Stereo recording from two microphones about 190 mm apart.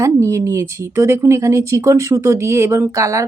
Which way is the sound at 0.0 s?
15° right (ahead or behind).